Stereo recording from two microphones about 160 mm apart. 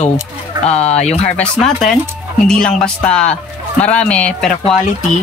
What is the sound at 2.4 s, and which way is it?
Speech, 5° left (ahead or behind).